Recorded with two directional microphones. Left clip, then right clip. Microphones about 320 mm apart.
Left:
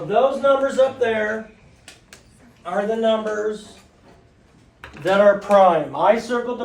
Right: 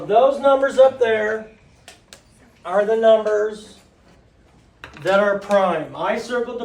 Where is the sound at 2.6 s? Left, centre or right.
Centre.